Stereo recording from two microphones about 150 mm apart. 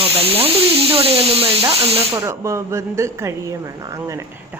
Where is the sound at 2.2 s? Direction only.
20° right (ahead or behind).